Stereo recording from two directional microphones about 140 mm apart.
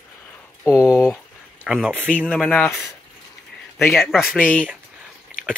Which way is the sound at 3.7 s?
Centre (ahead or behind).